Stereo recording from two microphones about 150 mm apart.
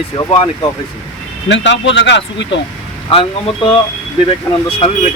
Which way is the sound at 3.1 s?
35° left (ahead or behind).